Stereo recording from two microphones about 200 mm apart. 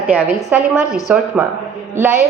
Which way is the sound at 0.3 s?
10° right (ahead or behind).